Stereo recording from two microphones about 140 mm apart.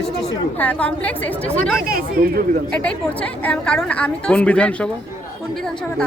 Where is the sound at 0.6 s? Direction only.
10° left (ahead or behind).